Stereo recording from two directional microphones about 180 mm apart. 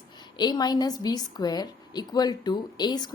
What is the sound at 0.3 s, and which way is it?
A woman's voice, 25° left (ahead or behind).